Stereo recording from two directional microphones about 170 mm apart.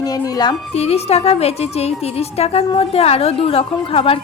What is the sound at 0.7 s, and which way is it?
A woman's voice, 40° left (ahead or behind).